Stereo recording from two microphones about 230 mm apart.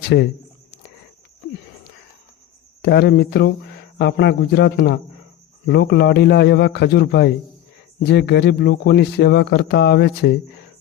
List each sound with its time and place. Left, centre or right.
0.0 s speech: left
2.8 s speech: left